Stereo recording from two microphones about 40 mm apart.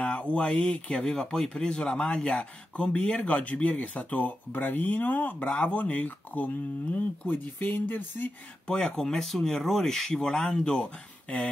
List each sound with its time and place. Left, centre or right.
0.0 s speech: left
2.1 s speech: centre
2.7 s speech: left
4.5 s speech: left
8.6 s speech: left
8.9 s speech: centre; by 11.4 s left